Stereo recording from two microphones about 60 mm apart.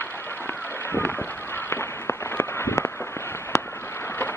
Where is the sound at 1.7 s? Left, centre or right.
Left.